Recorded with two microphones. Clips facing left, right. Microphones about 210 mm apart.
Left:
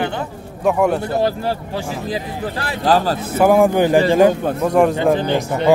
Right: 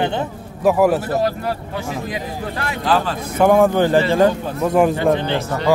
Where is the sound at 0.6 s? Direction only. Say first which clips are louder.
Right 2 dB; 5° right (ahead or behind).